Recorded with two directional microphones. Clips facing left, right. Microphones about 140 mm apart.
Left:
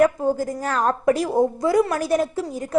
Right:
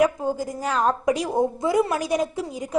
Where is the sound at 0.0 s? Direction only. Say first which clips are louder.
Left 3 dB; 15° right (ahead or behind).